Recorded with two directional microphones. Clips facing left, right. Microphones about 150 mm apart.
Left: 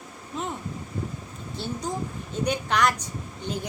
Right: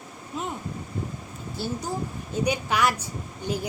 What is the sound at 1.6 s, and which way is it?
A woman's voice, 5° right (ahead or behind).